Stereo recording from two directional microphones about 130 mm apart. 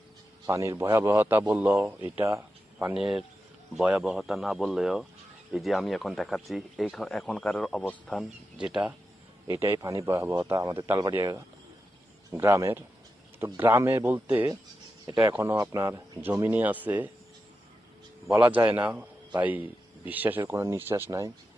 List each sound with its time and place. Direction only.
0.4 s a man's voice: 25° right (ahead or behind)
2.9 s speech: 5° right (ahead or behind)
9.5 s a man's voice: 20° right (ahead or behind)
15.1 s speech: 30° right (ahead or behind)
15.4 s a man's voice: 20° right (ahead or behind)
16.3 s a man's voice: 15° right (ahead or behind)
18.3 s a man's voice: 15° right (ahead or behind)